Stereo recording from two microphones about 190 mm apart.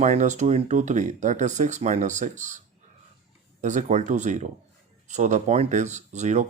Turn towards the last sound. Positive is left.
turn(degrees=-40)  # may be behind; listen again after turning